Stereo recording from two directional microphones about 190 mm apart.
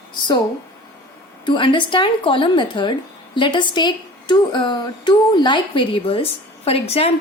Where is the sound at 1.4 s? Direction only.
25° left (ahead or behind).